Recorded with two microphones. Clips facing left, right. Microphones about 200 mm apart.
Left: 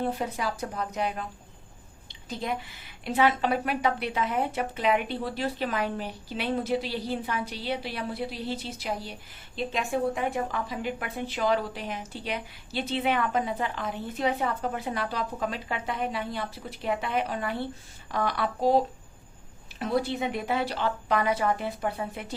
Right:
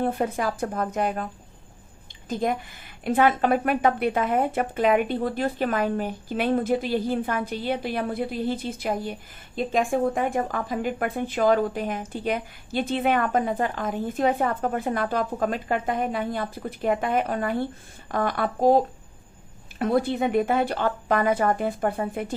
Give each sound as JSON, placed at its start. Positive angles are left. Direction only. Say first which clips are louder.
{"t": 0.0, "sound": "a woman's voice", "louder": "right 5 dB", "side_deg": -50}
{"t": 2.3, "sound": "a woman's voice", "louder": "right 6 dB", "side_deg": -50}
{"t": 19.8, "sound": "a woman's voice", "louder": "right 5 dB", "side_deg": -55}